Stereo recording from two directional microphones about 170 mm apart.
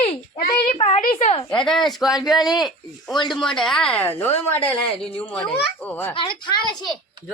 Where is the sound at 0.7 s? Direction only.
35° left (ahead or behind).